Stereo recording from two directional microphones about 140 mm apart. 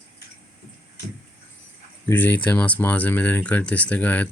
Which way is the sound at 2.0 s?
15° left (ahead or behind).